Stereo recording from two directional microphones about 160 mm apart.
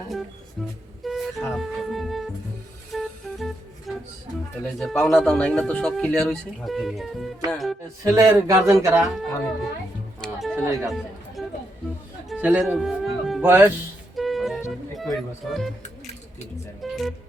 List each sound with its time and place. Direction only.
0.1 s music: centre (ahead or behind)
4.6 s speech: 5° left (ahead or behind)
7.5 s music: centre (ahead or behind)
8.0 s speech: 20° right (ahead or behind)
9.1 s speech: centre (ahead or behind)
10.2 s music: centre (ahead or behind)
12.3 s a man's voice: 10° right (ahead or behind)
12.8 s music: centre (ahead or behind)
13.4 s speech: 10° right (ahead or behind)
14.2 s music: centre (ahead or behind)
14.7 s speech: centre (ahead or behind)
16.8 s music: centre (ahead or behind)